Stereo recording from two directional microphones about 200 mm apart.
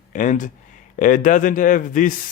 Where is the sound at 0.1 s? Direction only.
40° left (ahead or behind).